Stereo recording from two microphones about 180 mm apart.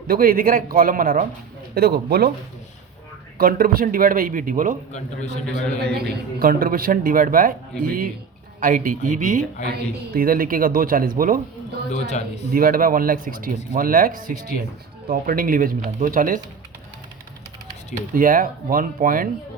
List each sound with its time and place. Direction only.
0.1 s a woman's voice: 55° right (ahead or behind)
3.3 s a woman's voice: 55° right (ahead or behind)
4.9 s a man's voice: 40° left (ahead or behind)
6.1 s a woman's voice: 55° right (ahead or behind)
9.6 s a woman's voice: 55° right (ahead or behind)
11.9 s a man's voice: 40° left (ahead or behind)
12.5 s a woman's voice: 50° right (ahead or behind)
18.1 s a woman's voice: 50° right (ahead or behind)